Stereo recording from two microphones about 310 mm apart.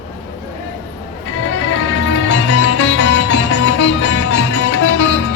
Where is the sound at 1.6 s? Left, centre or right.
Left.